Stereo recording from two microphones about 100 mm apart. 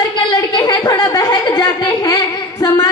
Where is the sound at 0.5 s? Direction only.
40° left (ahead or behind).